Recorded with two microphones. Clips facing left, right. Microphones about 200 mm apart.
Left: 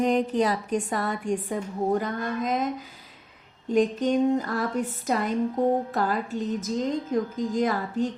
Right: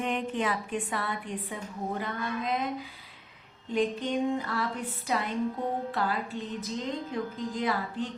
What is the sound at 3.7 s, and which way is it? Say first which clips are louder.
A woman's voice: left 6 dB; 45° left (ahead or behind).